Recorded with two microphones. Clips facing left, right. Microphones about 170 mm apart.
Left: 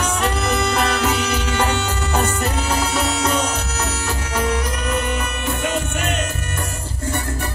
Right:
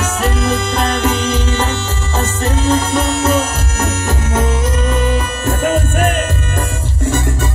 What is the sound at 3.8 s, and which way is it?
Music, 20° right (ahead or behind).